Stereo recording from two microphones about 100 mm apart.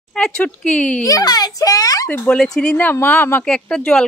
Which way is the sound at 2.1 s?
5° left (ahead or behind).